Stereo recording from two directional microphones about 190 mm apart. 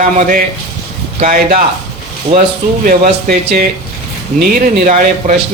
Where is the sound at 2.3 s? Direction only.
35° right (ahead or behind).